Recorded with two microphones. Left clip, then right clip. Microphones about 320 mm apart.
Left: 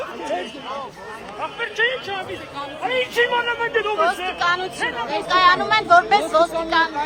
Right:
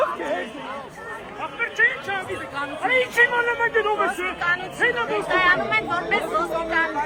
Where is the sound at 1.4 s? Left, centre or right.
Left.